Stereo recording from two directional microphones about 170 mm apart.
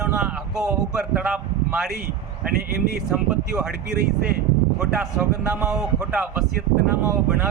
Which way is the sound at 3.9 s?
60° right (ahead or behind).